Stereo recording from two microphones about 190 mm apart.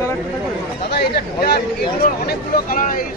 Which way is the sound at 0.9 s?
55° left (ahead or behind).